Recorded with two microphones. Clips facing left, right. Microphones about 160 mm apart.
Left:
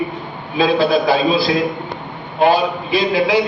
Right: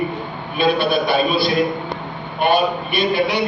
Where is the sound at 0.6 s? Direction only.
90° left.